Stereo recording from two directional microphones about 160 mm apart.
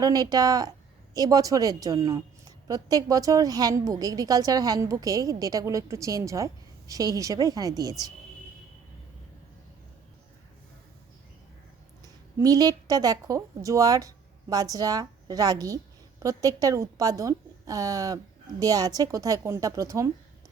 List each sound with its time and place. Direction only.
0.0 s a woman's voice: 25° right (ahead or behind)
12.0 s a woman's voice: 25° right (ahead or behind)